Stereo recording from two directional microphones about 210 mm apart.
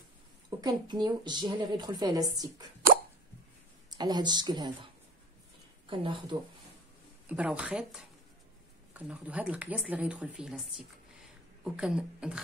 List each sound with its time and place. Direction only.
0.6 s a woman's voice: 20° right (ahead or behind)
4.0 s a woman's voice: 20° right (ahead or behind)
5.9 s a woman's voice: 25° right (ahead or behind)
7.2 s speech: 5° right (ahead or behind)